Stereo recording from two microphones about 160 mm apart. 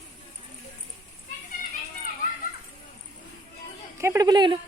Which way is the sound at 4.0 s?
20° right (ahead or behind).